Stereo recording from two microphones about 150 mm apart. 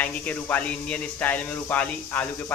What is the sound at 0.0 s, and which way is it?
Speech, 10° left (ahead or behind).